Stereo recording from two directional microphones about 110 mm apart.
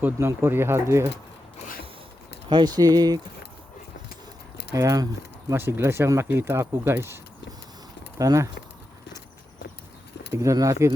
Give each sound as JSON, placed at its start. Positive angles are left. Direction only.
{"t": 0.0, "sound": "speech", "side_deg": -25}
{"t": 2.5, "sound": "speech", "side_deg": -40}
{"t": 4.7, "sound": "speech", "side_deg": -30}
{"t": 8.2, "sound": "speech", "side_deg": -30}
{"t": 10.3, "sound": "speech", "side_deg": -30}